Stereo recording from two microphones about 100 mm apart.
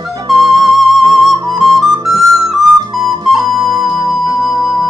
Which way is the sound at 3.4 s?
40° right (ahead or behind).